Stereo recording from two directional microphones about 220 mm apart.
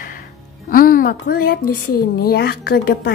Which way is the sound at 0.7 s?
40° left (ahead or behind).